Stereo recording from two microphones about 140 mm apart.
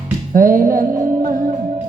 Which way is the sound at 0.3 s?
75° right (ahead or behind).